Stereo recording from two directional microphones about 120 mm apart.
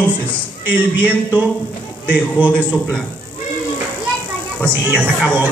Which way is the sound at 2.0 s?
15° right (ahead or behind).